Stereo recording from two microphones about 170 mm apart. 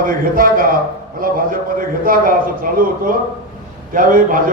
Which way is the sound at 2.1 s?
55° right (ahead or behind).